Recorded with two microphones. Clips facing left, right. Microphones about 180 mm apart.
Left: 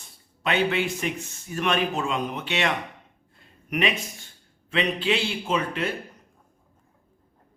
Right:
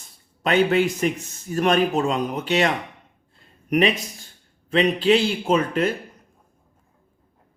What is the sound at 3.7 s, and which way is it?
A man's voice, 40° right (ahead or behind).